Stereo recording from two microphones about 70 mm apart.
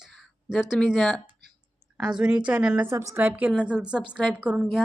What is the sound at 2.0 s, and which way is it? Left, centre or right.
Speech, centre.